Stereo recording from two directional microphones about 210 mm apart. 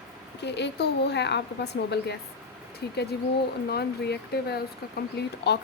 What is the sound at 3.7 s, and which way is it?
A woman's voice, 50° left (ahead or behind).